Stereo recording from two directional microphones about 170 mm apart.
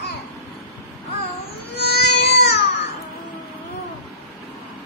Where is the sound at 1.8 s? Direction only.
70° left (ahead or behind).